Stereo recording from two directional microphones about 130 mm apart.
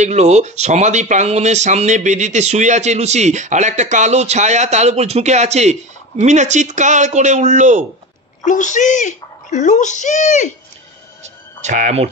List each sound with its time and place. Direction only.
0.0 s speech: 60° right (ahead or behind)
8.5 s speech: 70° left (ahead or behind)
11.6 s speech: 65° right (ahead or behind)